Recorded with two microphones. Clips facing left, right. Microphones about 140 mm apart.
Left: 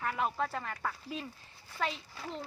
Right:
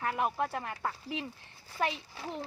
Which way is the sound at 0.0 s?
20° right (ahead or behind).